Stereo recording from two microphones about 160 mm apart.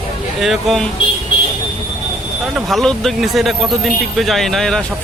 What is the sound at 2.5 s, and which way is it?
Speech, centre (ahead or behind).